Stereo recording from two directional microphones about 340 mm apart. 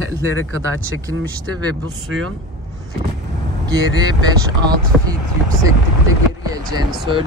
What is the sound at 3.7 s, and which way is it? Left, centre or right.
Speech, centre.